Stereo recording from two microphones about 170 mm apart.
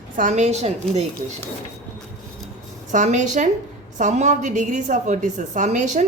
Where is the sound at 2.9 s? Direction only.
45° right (ahead or behind).